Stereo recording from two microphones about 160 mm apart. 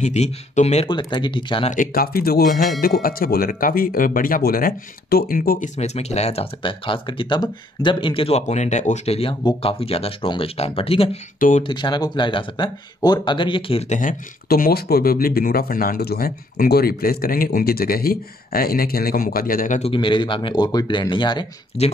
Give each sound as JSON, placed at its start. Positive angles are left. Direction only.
{"t": 0.0, "sound": "speech", "side_deg": 45}
{"t": 0.8, "sound": "speech", "side_deg": 30}
{"t": 1.7, "sound": "speech", "side_deg": 60}
{"t": 5.8, "sound": "speech", "side_deg": 45}
{"t": 11.3, "sound": "speech", "side_deg": 55}
{"t": 11.6, "sound": "speech", "side_deg": 30}
{"t": 13.9, "sound": "speech", "side_deg": 60}
{"t": 19.8, "sound": "speech", "side_deg": 30}
{"t": 21.8, "sound": "speech", "side_deg": 40}